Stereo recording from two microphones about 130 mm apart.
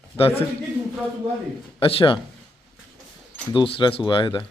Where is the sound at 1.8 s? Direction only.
45° left (ahead or behind).